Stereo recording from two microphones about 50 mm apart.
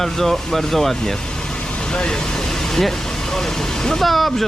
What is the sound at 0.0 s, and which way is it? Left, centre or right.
Speech, centre.